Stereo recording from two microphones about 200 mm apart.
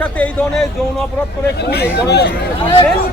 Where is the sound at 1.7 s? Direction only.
55° left (ahead or behind).